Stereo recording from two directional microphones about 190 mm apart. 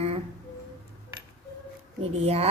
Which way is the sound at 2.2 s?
30° right (ahead or behind).